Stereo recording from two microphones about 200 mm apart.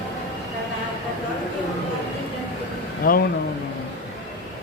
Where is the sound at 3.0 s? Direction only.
45° left (ahead or behind).